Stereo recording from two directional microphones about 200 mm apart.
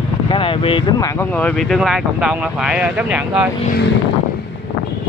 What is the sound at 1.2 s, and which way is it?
Speech, 5° left (ahead or behind).